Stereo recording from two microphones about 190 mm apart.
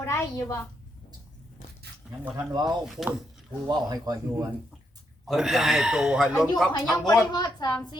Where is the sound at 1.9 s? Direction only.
60° right (ahead or behind).